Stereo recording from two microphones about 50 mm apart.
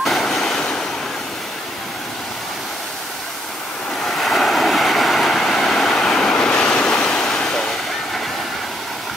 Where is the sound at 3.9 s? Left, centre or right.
Centre.